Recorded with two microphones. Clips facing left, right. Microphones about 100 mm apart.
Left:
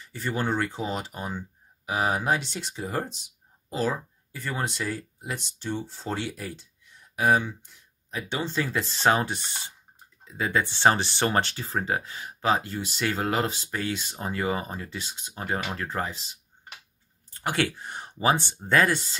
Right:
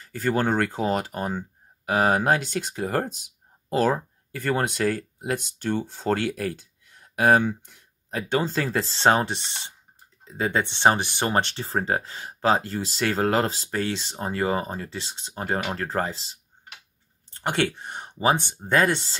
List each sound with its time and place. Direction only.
0.0 s speech: 45° right (ahead or behind)
8.4 s speech: 45° right (ahead or behind); by 19.1 s 30° right (ahead or behind)